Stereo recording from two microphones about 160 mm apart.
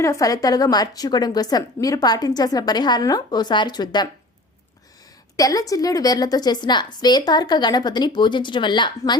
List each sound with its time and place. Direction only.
0.0 s a woman's voice: 20° left (ahead or behind)
5.4 s a woman's voice: 20° left (ahead or behind)